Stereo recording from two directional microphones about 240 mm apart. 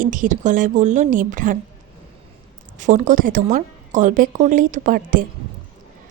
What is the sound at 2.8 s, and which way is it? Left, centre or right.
A woman's voice, right.